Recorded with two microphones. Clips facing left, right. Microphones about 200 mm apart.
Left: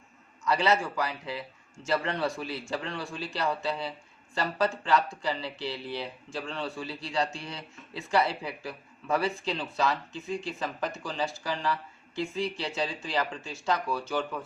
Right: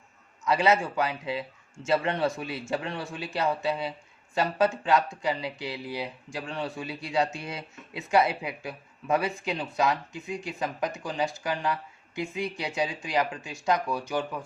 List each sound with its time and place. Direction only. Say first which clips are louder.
0.4 s speech: right 2 dB; 20° right (ahead or behind)